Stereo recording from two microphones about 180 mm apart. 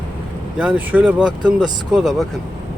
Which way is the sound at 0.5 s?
5° right (ahead or behind).